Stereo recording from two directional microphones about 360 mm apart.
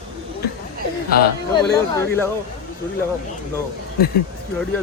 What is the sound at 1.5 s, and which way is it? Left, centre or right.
Speech, centre.